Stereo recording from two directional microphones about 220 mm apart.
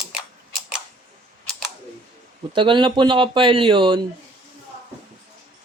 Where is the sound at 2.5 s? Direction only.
20° right (ahead or behind).